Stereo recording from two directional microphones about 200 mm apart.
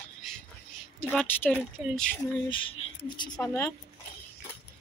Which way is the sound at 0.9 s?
10° left (ahead or behind).